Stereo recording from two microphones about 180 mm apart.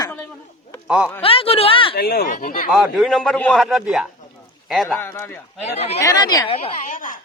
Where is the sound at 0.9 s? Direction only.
5° right (ahead or behind).